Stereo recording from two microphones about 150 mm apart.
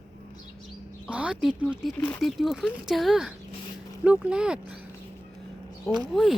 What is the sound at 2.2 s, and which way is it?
Speech, centre (ahead or behind).